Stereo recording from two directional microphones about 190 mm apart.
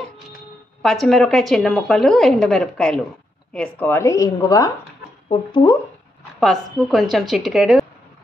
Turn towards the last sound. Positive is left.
turn(degrees=0)  # may be behind; listen again after turning